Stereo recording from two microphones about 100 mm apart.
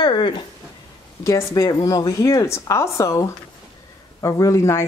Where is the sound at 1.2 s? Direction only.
30° left (ahead or behind).